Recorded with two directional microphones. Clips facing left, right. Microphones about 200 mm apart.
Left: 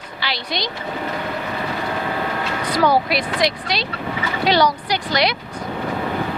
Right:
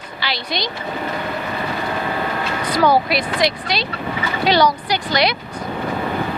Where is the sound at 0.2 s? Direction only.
10° right (ahead or behind).